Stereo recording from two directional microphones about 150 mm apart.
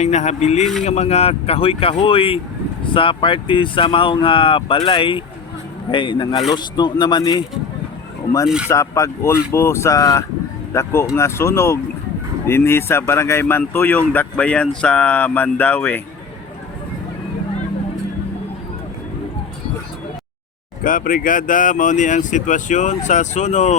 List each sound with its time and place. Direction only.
0.0 s a man's voice: 50° left (ahead or behind); by 7.4 s 30° left (ahead or behind)
8.4 s speech: 5° right (ahead or behind)
8.7 s speech: 20° left (ahead or behind)
20.8 s speech: 65° left (ahead or behind)